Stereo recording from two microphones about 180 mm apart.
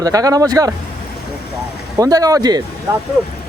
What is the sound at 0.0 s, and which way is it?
Speech, 20° right (ahead or behind).